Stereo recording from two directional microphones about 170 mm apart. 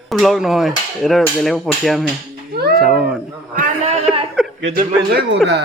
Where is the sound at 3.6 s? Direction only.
50° right (ahead or behind).